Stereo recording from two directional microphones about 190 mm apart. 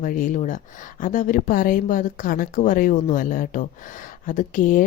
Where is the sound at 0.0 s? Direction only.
40° left (ahead or behind).